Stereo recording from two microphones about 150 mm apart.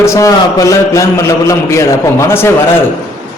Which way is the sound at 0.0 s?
20° left (ahead or behind).